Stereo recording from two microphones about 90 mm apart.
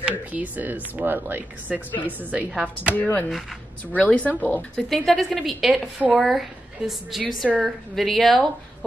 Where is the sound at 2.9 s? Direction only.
20° left (ahead or behind).